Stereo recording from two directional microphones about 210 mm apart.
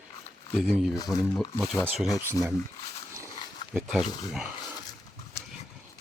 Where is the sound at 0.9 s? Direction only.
15° left (ahead or behind).